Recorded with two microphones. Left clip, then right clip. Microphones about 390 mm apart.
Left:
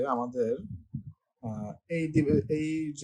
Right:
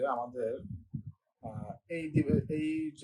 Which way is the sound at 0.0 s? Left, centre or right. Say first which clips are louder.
Left 4 dB; left.